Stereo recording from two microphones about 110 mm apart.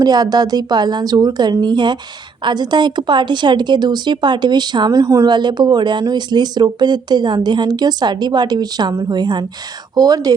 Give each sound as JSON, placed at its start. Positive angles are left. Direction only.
{"t": 0.0, "sound": "speech", "side_deg": -35}